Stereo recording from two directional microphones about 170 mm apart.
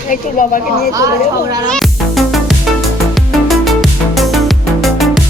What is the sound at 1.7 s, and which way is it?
Music, centre (ahead or behind).